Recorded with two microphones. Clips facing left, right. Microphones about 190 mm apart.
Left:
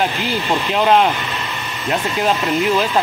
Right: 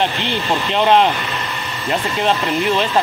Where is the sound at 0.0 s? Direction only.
Centre (ahead or behind).